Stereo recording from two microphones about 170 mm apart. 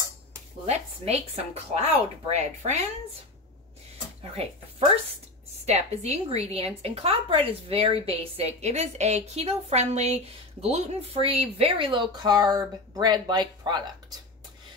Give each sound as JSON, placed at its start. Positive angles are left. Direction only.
{"t": 0.7, "sound": "a woman's voice", "side_deg": -40}
{"t": 4.2, "sound": "a woman's voice", "side_deg": -35}